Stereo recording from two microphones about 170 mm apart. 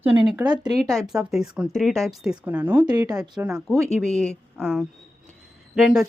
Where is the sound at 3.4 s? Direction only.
5° right (ahead or behind).